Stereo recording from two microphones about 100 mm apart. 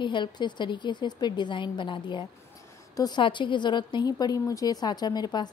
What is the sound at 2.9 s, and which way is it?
Speech, 40° left (ahead or behind).